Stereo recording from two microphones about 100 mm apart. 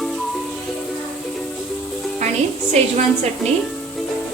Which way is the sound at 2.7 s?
90° right.